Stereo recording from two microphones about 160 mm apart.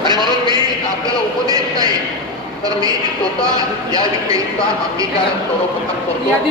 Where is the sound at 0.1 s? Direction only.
30° right (ahead or behind).